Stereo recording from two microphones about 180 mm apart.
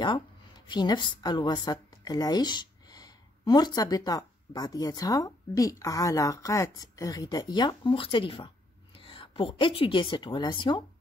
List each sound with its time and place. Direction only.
0.7 s a woman's voice: 25° left (ahead or behind)